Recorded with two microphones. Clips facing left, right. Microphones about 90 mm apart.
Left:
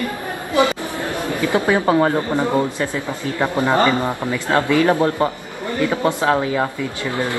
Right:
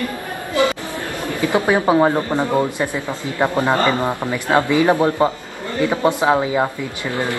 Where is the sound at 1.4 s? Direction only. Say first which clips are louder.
Right 1 dB; 20° right (ahead or behind).